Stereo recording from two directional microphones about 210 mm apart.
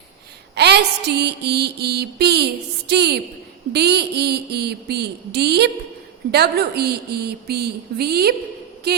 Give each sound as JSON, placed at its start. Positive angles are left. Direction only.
{"t": 0.5, "sound": "speech", "side_deg": -50}